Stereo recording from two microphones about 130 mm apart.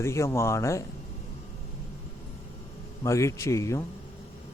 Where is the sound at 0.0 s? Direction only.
20° left (ahead or behind).